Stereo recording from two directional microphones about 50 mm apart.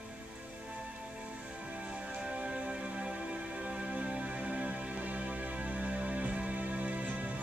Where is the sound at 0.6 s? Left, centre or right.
Centre.